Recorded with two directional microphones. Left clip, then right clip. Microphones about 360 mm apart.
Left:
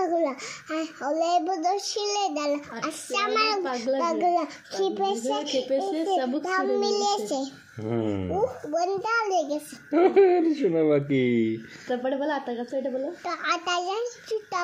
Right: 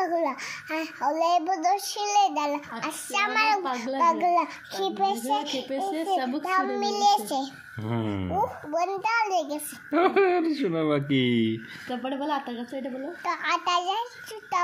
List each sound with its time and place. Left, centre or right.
0.0 s a child's voice: centre
7.8 s speech: right
8.7 s a child's voice: centre
9.9 s a woman's voice: right; by 14.0 s centre